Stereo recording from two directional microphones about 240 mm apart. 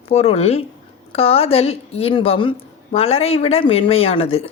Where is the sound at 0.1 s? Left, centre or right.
Left.